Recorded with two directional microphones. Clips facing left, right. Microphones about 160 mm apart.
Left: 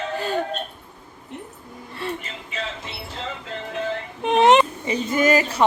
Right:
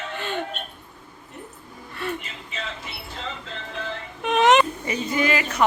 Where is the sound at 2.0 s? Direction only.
30° left (ahead or behind).